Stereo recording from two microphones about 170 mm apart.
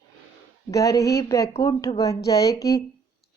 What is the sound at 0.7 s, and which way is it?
Speech, 20° left (ahead or behind).